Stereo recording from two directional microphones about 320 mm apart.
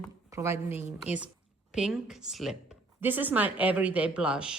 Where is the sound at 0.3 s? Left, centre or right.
Centre.